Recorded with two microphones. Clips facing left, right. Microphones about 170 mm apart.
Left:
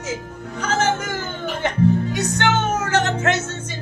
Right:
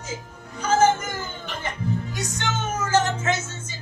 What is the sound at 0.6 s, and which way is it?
Music, 80° left.